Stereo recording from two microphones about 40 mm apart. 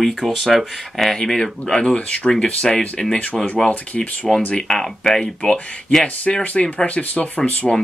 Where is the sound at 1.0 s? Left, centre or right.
Centre.